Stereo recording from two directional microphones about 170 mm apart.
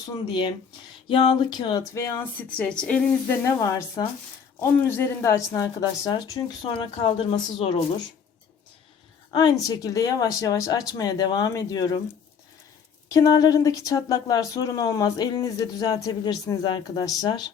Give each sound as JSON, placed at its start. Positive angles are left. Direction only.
{"t": 0.3, "sound": "speech", "side_deg": 25}
{"t": 2.6, "sound": "a woman's voice", "side_deg": 5}
{"t": 3.4, "sound": "speech", "side_deg": 15}
{"t": 9.3, "sound": "speech", "side_deg": 25}
{"t": 13.1, "sound": "speech", "side_deg": 20}